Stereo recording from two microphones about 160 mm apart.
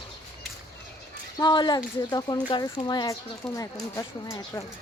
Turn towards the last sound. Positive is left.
turn(degrees=20)  # may be behind; listen again after turning